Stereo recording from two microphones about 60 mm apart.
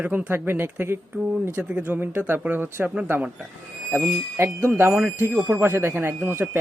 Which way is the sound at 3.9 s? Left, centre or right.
Right.